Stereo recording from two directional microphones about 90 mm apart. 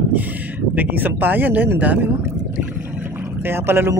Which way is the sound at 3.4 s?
25° right (ahead or behind).